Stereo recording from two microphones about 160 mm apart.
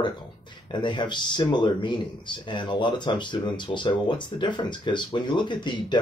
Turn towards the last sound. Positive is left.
turn(degrees=30)  # may be behind; listen again after turning